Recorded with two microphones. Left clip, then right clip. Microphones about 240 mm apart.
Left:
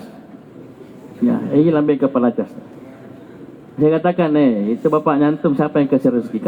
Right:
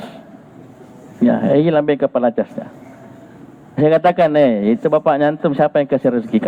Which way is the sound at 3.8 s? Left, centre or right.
Right.